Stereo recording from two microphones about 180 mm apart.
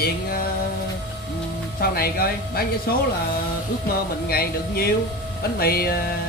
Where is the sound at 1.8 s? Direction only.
55° left (ahead or behind).